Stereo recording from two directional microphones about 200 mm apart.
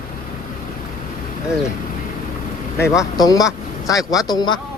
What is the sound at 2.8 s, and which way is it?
Speech, 15° left (ahead or behind).